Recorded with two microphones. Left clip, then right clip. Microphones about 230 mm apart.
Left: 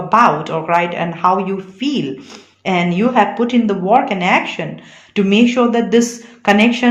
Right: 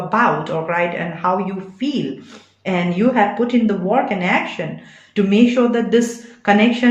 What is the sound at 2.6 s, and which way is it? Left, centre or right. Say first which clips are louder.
Speech: left 3 dB; left.